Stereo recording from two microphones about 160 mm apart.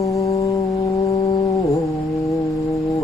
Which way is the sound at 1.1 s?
35° left (ahead or behind).